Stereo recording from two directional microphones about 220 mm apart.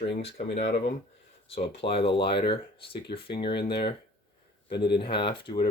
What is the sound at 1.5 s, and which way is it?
Speech, 25° left (ahead or behind).